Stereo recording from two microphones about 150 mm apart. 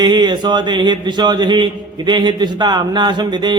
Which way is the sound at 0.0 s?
30° right (ahead or behind).